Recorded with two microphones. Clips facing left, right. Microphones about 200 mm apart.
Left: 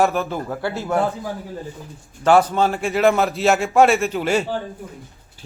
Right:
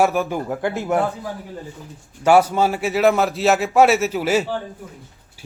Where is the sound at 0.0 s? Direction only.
10° right (ahead or behind).